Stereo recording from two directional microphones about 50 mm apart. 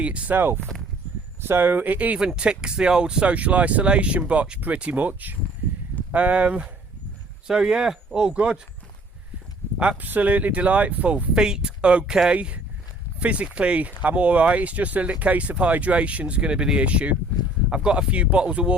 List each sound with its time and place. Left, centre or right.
0.0 s speech: right
0.3 s speech: right
2.1 s speech: centre; by 5.4 s right
6.1 s speech: right
10.0 s speech: right
11.3 s speech: centre
13.1 s speech: right